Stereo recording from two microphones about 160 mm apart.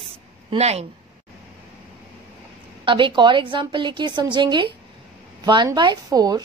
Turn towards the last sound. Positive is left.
turn(degrees=-25)  # may be behind; listen again after turning